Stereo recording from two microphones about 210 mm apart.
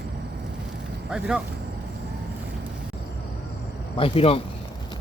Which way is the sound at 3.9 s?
25° left (ahead or behind).